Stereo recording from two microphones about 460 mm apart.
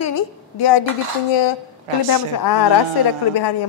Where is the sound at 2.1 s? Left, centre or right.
Left.